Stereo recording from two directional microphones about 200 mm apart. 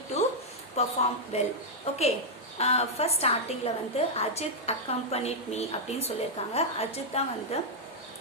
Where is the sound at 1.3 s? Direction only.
30° left (ahead or behind).